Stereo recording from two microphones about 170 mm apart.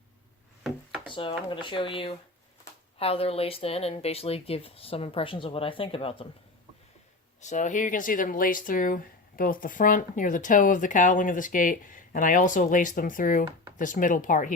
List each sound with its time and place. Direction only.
1.1 s speech: 30° left (ahead or behind)
7.4 s speech: 45° left (ahead or behind)